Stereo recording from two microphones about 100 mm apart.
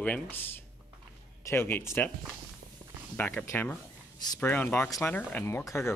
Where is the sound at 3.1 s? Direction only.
20° left (ahead or behind).